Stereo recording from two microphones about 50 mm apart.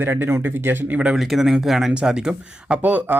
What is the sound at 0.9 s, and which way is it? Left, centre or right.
Speech, centre.